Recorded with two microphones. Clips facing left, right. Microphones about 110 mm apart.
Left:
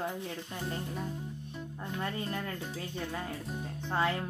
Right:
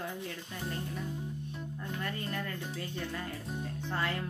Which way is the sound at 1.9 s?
20° left (ahead or behind).